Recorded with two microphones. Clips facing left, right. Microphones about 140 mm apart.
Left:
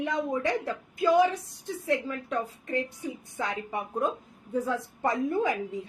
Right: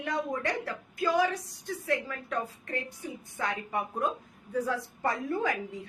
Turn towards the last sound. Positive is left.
turn(degrees=20)  # may be behind; listen again after turning